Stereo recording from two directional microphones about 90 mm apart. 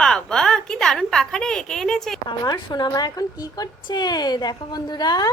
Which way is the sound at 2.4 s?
45° left (ahead or behind).